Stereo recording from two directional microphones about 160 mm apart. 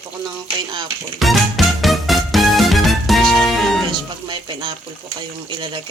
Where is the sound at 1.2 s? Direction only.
Centre (ahead or behind).